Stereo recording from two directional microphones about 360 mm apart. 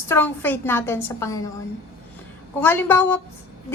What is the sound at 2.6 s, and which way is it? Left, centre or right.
Speech, centre.